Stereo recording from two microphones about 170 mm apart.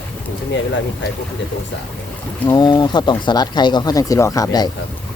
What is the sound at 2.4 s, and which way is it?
Speech, 25° left (ahead or behind).